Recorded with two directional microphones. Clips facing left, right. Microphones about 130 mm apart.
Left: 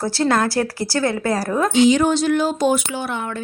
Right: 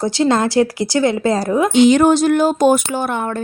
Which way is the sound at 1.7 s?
55° right (ahead or behind).